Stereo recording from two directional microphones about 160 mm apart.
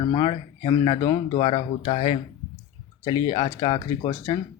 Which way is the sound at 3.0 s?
25° left (ahead or behind).